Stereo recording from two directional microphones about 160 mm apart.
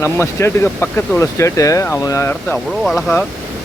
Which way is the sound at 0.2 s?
15° left (ahead or behind).